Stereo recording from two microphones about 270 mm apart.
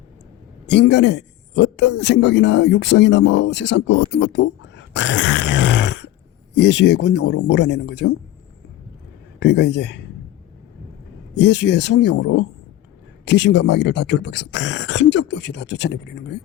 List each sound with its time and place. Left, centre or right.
0.7 s a man's voice: left
9.4 s a man's voice: left
11.3 s a man's voice: left